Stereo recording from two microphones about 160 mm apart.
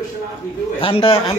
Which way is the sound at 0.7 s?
35° left (ahead or behind).